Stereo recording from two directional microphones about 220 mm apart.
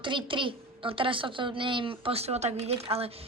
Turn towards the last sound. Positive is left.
turn(degrees=-25)  # may be behind; listen again after turning